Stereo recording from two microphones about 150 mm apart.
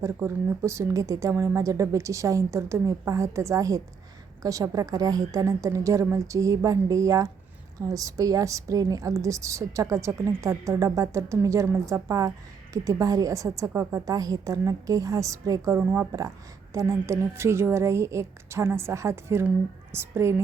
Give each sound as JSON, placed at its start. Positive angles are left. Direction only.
{"t": 0.0, "sound": "a woman's voice", "side_deg": -20}